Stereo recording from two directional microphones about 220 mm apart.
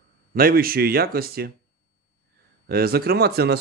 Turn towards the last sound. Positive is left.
turn(degrees=-45)  # may be behind; listen again after turning